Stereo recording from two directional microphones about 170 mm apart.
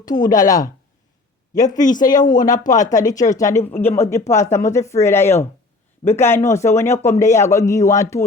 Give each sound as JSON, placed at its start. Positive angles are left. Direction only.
{"t": 0.0, "sound": "a man's voice", "side_deg": 20}